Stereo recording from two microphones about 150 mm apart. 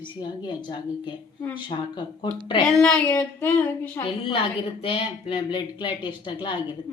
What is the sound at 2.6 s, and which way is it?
Speech, 5° left (ahead or behind).